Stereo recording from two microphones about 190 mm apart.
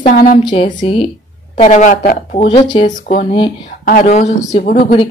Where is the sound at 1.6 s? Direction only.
40° left (ahead or behind).